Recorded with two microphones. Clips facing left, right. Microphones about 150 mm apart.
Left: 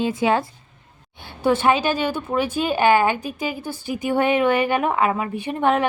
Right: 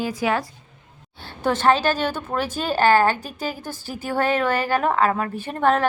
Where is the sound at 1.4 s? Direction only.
10° left (ahead or behind).